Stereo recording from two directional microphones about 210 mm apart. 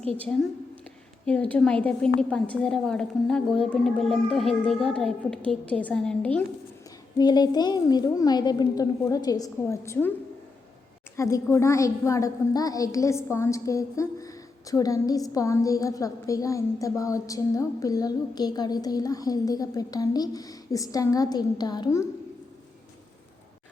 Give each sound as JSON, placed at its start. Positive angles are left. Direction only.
{"t": 1.2, "sound": "a woman's voice", "side_deg": 5}
{"t": 7.2, "sound": "a woman's voice", "side_deg": 20}
{"t": 11.2, "sound": "a woman's voice", "side_deg": 15}